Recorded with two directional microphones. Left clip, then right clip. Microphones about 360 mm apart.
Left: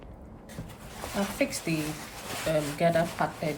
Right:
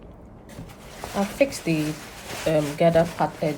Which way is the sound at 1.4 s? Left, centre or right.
Centre.